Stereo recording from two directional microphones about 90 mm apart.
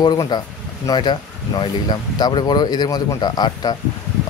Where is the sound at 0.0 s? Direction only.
55° left (ahead or behind).